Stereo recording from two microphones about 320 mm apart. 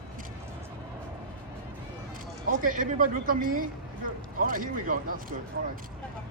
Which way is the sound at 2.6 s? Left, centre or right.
Right.